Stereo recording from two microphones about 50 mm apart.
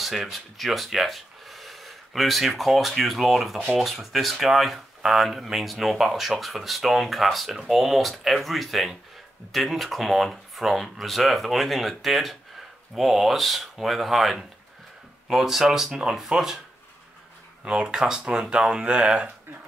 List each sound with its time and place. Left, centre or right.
0.0 s speech: centre
17.6 s speech: centre